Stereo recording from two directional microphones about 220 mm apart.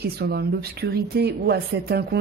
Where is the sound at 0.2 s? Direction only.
45° right (ahead or behind).